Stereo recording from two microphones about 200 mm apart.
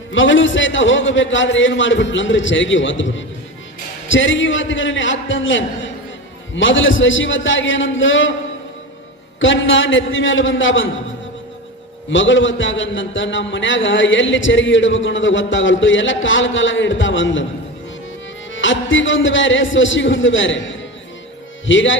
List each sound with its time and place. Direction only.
0.1 s a man's voice: 70° left (ahead or behind)
9.4 s a man's voice: 70° left (ahead or behind)
12.1 s a man's voice: 70° left (ahead or behind)
18.5 s a man's voice: 70° left (ahead or behind)